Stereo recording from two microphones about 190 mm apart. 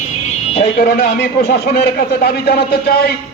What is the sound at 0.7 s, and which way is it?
A man's voice, 50° left (ahead or behind).